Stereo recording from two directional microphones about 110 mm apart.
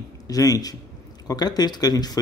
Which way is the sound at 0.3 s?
35° left (ahead or behind).